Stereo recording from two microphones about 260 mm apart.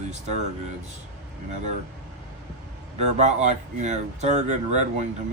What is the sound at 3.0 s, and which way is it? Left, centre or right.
Speech, right.